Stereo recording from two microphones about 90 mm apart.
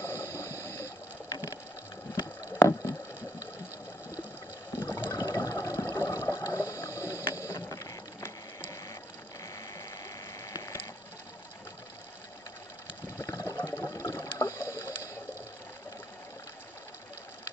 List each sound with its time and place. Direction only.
0.0 s rowboat: 30° left (ahead or behind)
2.4 s a sound: 35° left (ahead or behind)
4.7 s water: 25° left (ahead or behind)
5.1 s water: 40° left (ahead or behind)
7.3 s ratchet: 35° left (ahead or behind)
8.2 s ratchet: 25° left (ahead or behind)
9.8 s ratchet: 40° left (ahead or behind)
13.2 s water: 35° left (ahead or behind)
13.8 s rowboat: 35° left (ahead or behind)